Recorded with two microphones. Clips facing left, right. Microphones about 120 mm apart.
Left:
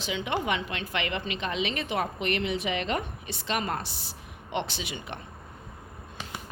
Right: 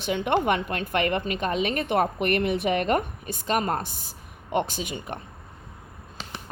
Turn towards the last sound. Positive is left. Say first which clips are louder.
# right 4 dB
turn(degrees=-45)  # may be behind; listen again after turning